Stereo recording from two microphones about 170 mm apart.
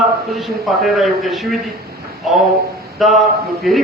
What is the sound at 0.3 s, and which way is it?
A man's voice, centre (ahead or behind).